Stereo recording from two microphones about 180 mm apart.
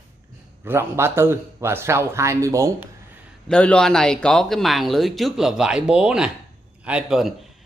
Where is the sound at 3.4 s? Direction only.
5° left (ahead or behind).